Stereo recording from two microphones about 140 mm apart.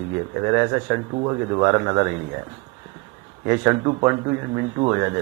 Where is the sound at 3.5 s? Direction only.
25° right (ahead or behind).